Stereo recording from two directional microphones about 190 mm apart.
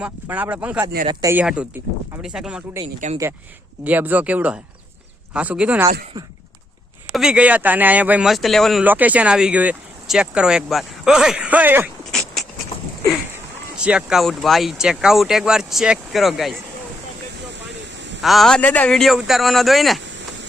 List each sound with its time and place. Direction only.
0.0 s speech: 10° right (ahead or behind)
2.8 s speech: 35° right (ahead or behind)
3.8 s speech: 10° right (ahead or behind)
7.1 s speech: 5° right (ahead or behind)
12.1 s a sound: centre (ahead or behind)
13.7 s speech: 5° right (ahead or behind)
18.2 s speech: centre (ahead or behind)
20.1 s a sound: 75° right (ahead or behind)